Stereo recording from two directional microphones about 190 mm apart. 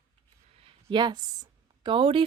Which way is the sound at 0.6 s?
30° right (ahead or behind).